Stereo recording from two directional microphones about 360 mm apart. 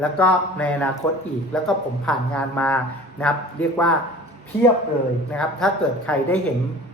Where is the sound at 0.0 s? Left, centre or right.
Centre.